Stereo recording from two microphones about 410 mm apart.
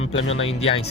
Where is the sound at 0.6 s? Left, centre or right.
Centre.